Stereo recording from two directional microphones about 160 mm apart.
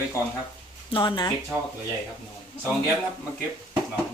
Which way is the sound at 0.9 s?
30° left (ahead or behind).